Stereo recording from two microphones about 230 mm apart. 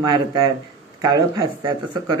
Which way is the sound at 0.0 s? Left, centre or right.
Centre.